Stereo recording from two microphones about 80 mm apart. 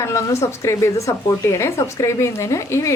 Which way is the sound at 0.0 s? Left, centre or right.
Left.